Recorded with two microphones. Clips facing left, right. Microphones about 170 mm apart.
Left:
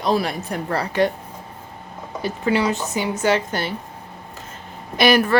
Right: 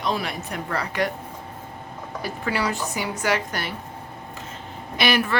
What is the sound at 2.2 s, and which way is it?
Speech, 20° left (ahead or behind).